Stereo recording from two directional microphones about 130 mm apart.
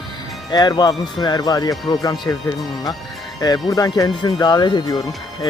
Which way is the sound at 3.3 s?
30° left (ahead or behind).